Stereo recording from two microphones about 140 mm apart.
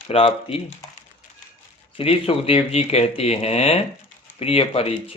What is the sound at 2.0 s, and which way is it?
Speech, 40° left (ahead or behind).